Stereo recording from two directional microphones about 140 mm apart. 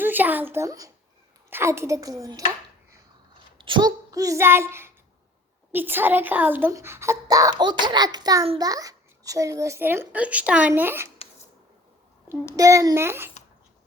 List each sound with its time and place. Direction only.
0.0 s a woman's voice: 15° right (ahead or behind)
3.6 s a child's voice: 35° right (ahead or behind); by 11.1 s 15° right (ahead or behind)
12.5 s a woman's voice: 25° right (ahead or behind)